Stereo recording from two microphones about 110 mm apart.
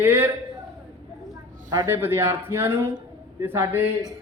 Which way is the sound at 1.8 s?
20° right (ahead or behind).